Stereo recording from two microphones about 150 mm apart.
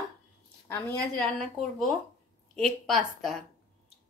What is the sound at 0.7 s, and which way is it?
Speech, 15° left (ahead or behind).